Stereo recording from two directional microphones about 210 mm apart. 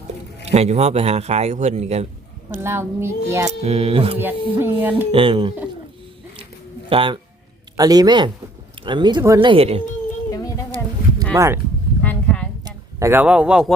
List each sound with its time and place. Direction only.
0.4 s a man's voice: 30° right (ahead or behind)
2.6 s a child's voice: 10° right (ahead or behind)
3.6 s speech: 30° right (ahead or behind)
4.5 s a child's voice: 10° right (ahead or behind)
5.1 s speech: 25° right (ahead or behind)
6.9 s speech: 25° right (ahead or behind)
10.8 s a sound: 5° left (ahead or behind)
11.3 s a child's voice: 15° right (ahead or behind)
12.0 s a sound: 5° left (ahead or behind)
12.6 s speech: 10° right (ahead or behind)